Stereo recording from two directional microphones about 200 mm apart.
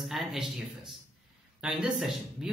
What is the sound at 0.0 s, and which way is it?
Speech, centre (ahead or behind).